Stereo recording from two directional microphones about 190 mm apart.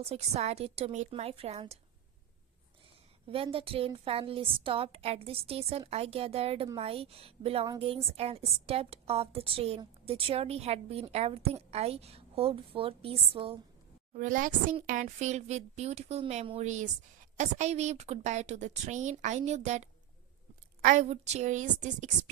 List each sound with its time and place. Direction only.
0.0 s a woman's voice: 35° right (ahead or behind)
3.2 s a woman's voice: 30° right (ahead or behind)
14.1 s a woman's voice: 45° right (ahead or behind)